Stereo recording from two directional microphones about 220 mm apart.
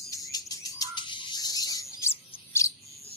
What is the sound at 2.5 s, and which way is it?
Bird, 15° left (ahead or behind).